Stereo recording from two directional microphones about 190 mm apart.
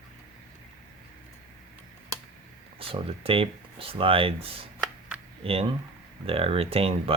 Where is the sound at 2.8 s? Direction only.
30° right (ahead or behind).